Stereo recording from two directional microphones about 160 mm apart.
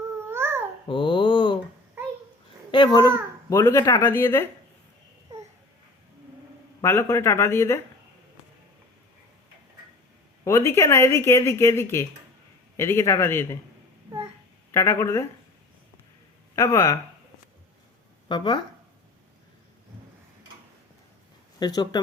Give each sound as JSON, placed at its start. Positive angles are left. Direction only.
{"t": 0.3, "sound": "babbling", "side_deg": -15}
{"t": 0.9, "sound": "a sound", "side_deg": 30}
{"t": 2.7, "sound": "speech", "side_deg": 30}
{"t": 6.8, "sound": "speech", "side_deg": 15}
{"t": 10.4, "sound": "speech", "side_deg": 20}
{"t": 14.7, "sound": "speech", "side_deg": 15}
{"t": 16.6, "sound": "speech", "side_deg": 15}
{"t": 18.3, "sound": "speech", "side_deg": 25}
{"t": 21.6, "sound": "speech", "side_deg": 25}